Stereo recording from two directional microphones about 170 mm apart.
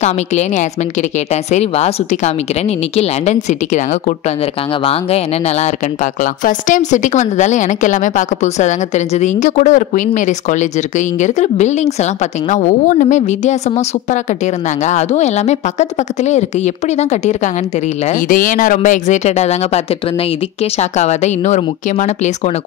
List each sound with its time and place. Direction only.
0.0 s a woman's voice: 45° left (ahead or behind)
6.2 s a woman's voice: 50° left (ahead or behind)
20.9 s a woman's voice: 40° left (ahead or behind)